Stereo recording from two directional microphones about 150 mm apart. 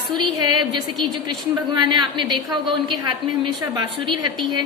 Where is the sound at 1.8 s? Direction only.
30° right (ahead or behind).